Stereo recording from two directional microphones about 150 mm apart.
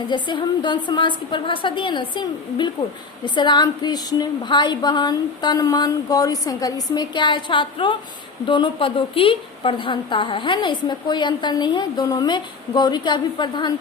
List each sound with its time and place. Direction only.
0.1 s a woman's voice: 30° left (ahead or behind)